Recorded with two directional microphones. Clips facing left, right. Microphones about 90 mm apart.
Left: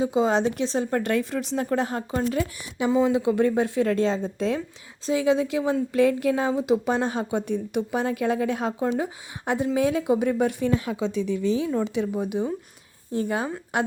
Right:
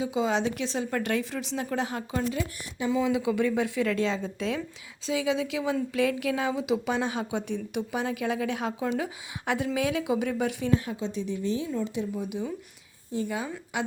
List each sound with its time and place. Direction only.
0.0 s speech: 40° left (ahead or behind)
2.3 s speech: 65° left (ahead or behind)
2.9 s a woman's voice: 35° left (ahead or behind)
10.8 s a woman's voice: 90° left
12.1 s a woman's voice: 55° left (ahead or behind)